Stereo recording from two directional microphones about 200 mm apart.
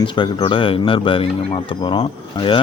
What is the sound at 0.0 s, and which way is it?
Speech, 25° left (ahead or behind).